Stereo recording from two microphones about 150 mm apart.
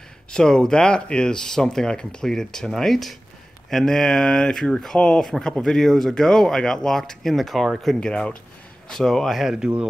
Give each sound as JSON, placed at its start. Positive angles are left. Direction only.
{"t": 0.3, "sound": "speech", "side_deg": 5}